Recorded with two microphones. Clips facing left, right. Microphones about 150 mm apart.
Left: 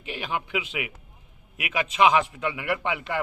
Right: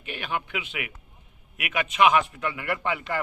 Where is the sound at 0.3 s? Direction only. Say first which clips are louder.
Left 1 dB; 20° left (ahead or behind).